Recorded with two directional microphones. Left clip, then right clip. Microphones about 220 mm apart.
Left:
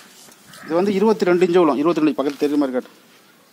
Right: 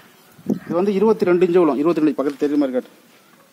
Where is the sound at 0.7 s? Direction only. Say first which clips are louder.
Even; 10° left (ahead or behind).